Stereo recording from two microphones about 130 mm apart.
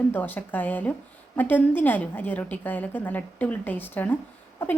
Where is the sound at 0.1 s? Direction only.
15° left (ahead or behind).